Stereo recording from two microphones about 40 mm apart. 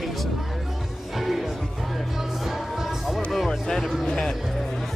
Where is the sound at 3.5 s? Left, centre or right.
Centre.